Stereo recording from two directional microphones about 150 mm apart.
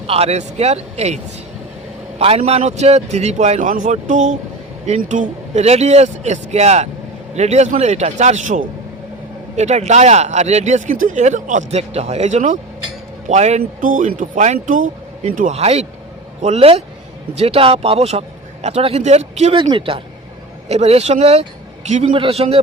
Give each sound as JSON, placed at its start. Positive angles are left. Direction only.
{"t": 0.1, "sound": "speech", "side_deg": -45}